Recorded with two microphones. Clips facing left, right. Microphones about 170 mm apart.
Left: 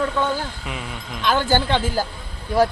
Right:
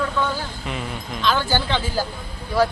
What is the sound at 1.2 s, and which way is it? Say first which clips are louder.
Speech: left 2 dB; 50° left (ahead or behind).